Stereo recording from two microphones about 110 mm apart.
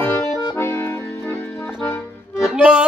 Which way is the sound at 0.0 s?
15° left (ahead or behind).